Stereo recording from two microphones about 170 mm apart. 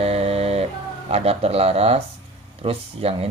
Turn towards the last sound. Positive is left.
turn(degrees=-35)  # may be behind; listen again after turning